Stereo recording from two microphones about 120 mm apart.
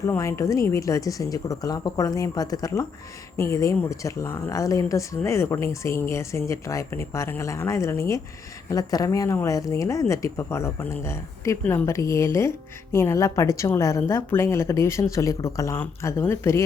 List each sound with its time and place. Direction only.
0.2 s speech: 25° left (ahead or behind)
11.6 s a woman's voice: 10° left (ahead or behind)
11.9 s speech: 25° left (ahead or behind)